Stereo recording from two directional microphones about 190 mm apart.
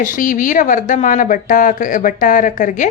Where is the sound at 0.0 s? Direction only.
45° left (ahead or behind).